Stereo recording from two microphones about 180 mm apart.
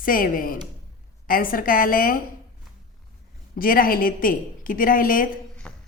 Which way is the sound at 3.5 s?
50° left (ahead or behind).